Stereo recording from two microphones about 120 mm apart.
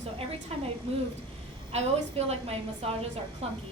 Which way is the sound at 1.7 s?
60° right (ahead or behind).